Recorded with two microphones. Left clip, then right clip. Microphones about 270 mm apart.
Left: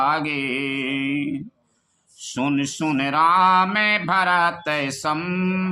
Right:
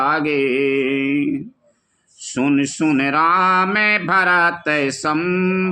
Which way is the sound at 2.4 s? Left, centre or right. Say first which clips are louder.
Right 5 dB; centre.